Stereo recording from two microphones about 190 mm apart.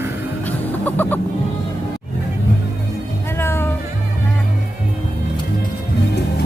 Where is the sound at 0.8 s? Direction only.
10° left (ahead or behind).